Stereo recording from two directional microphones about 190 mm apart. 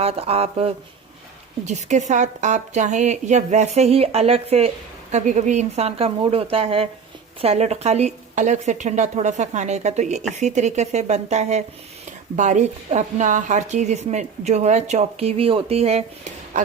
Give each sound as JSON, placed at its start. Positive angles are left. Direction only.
{"t": 0.0, "sound": "a woman's voice", "side_deg": -30}